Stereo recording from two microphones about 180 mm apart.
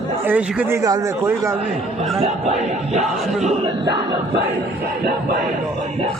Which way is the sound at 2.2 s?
40° right (ahead or behind).